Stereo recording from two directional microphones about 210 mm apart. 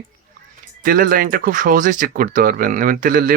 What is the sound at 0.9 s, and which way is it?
Speech, 45° right (ahead or behind).